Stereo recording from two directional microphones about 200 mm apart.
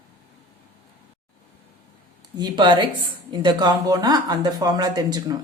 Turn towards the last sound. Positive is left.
turn(degrees=-20)  # may be behind; listen again after turning